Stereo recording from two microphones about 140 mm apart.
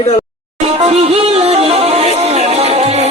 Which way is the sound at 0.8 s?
45° right (ahead or behind).